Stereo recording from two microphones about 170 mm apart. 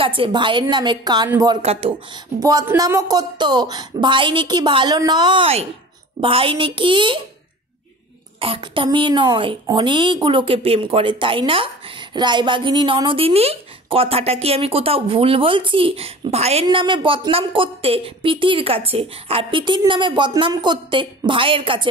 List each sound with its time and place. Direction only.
0.0 s a woman's voice: 30° right (ahead or behind)
1.6 s a woman's voice: 35° right (ahead or behind)
2.4 s a woman's voice: 15° right (ahead or behind)
8.4 s a woman's voice: 30° right (ahead or behind)